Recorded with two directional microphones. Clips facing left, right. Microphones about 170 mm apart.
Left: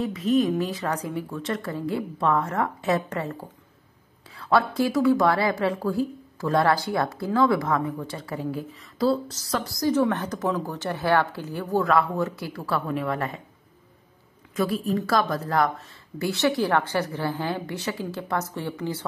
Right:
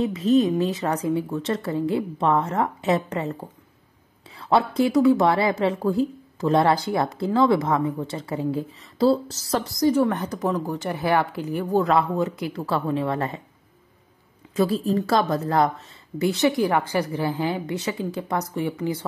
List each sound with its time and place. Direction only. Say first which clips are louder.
0.0 s a woman's voice: right 3 dB; 25° right (ahead or behind)
14.5 s a woman's voice: right 3 dB; 30° right (ahead or behind); by 18.9 s 15° right (ahead or behind)